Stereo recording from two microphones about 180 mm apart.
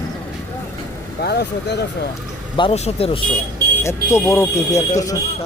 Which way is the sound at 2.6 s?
35° left (ahead or behind).